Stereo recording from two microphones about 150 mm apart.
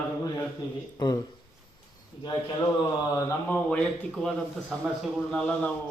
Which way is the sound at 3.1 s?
10° left (ahead or behind).